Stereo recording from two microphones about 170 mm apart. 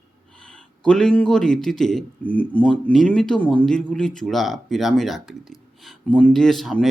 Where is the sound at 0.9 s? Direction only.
5° left (ahead or behind).